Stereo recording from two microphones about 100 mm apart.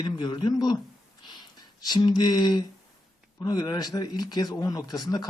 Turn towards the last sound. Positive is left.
turn(degrees=40)  # may be behind; listen again after turning